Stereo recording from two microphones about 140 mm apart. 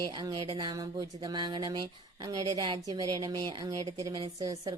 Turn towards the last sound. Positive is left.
turn(degrees=-25)  # may be behind; listen again after turning